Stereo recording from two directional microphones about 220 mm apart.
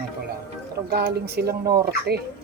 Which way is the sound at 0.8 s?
45° right (ahead or behind).